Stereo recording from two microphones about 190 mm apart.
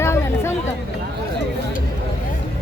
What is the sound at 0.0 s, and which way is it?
Chatter, 15° left (ahead or behind).